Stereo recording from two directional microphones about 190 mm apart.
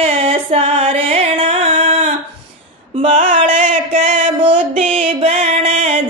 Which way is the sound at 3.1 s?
40° right (ahead or behind).